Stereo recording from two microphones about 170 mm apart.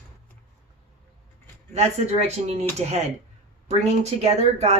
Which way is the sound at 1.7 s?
40° right (ahead or behind).